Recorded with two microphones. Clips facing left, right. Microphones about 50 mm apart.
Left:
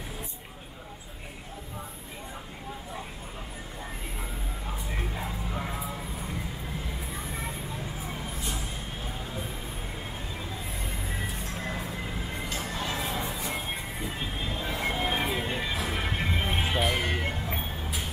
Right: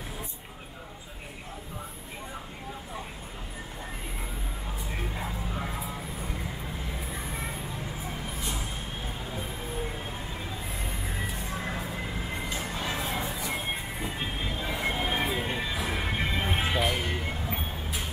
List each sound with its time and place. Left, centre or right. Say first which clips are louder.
5.1 s music: even; centre
11.4 s music: right 1 dB; centre
14.5 s music: left 1 dB; centre
17.0 s music: left 2 dB; left